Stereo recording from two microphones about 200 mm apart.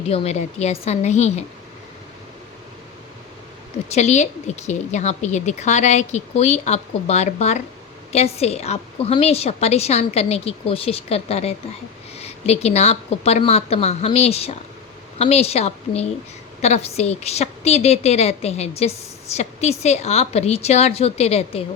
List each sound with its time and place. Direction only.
0.1 s a woman's voice: 30° left (ahead or behind)
3.8 s a woman's voice: 35° left (ahead or behind)